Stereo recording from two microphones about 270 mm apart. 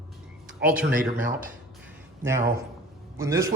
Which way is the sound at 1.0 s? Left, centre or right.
Right.